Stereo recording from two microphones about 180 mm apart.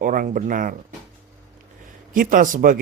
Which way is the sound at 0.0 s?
50° right (ahead or behind).